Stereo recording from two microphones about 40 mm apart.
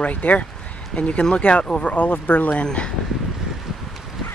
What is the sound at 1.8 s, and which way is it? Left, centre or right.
Speech, left.